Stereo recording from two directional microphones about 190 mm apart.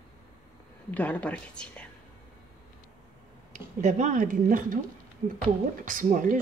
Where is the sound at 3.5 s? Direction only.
40° right (ahead or behind).